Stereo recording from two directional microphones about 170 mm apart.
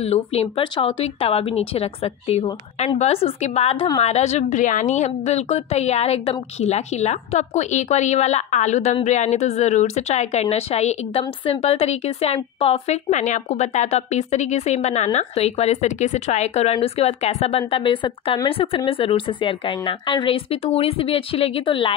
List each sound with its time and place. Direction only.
0.0 s a woman's voice: 40° left (ahead or behind)